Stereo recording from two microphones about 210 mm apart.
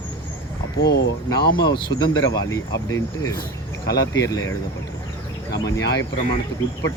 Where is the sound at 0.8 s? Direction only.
55° left (ahead or behind).